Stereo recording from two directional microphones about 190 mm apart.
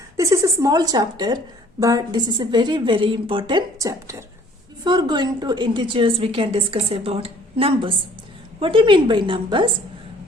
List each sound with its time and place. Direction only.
0.2 s a woman's voice: 15° right (ahead or behind)